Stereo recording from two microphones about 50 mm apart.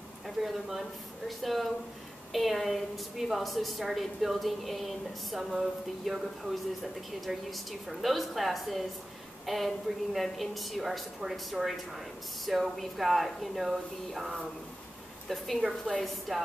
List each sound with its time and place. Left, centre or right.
0.4 s a woman's voice: centre